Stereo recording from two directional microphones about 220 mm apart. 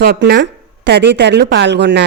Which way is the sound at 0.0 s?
45° right (ahead or behind).